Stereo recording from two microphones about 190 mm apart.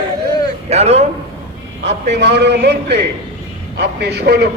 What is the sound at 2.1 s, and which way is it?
A man's voice, 65° right (ahead or behind).